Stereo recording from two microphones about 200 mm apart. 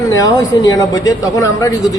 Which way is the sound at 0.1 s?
20° left (ahead or behind).